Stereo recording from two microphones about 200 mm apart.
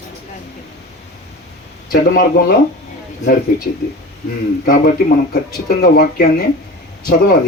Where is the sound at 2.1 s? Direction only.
50° left (ahead or behind).